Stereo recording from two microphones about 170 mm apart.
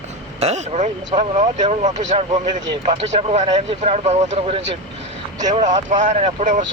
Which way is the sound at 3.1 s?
40° right (ahead or behind).